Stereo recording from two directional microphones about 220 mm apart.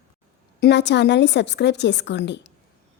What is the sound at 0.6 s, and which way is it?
Speech, 50° left (ahead or behind).